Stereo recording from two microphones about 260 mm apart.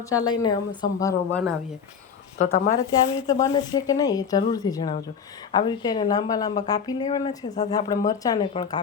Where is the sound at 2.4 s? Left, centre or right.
Left.